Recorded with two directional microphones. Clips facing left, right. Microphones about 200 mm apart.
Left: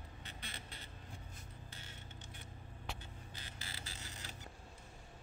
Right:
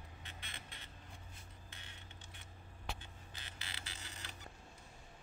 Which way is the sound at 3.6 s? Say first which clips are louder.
Even; 40° left (ahead or behind).